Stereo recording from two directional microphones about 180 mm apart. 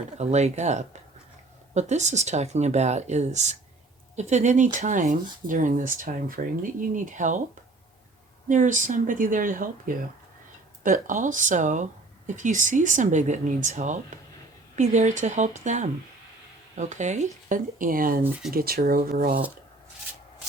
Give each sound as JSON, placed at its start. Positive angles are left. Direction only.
{"t": 0.2, "sound": "speech", "side_deg": -40}
{"t": 8.4, "sound": "speech", "side_deg": -45}